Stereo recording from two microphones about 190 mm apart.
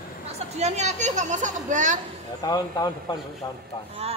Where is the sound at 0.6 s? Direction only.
35° right (ahead or behind).